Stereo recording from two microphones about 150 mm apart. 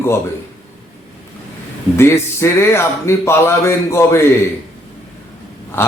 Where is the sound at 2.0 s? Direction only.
15° left (ahead or behind).